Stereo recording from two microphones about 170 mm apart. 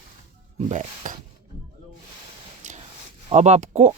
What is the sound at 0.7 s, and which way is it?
Speech, 45° right (ahead or behind).